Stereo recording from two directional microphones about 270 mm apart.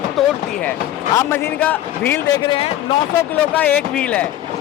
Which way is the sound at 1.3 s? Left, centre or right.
Centre.